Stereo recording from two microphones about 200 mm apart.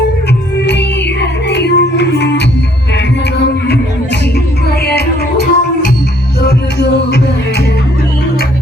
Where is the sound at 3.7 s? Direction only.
55° left (ahead or behind).